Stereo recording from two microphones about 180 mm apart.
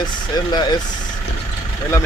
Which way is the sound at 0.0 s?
25° left (ahead or behind).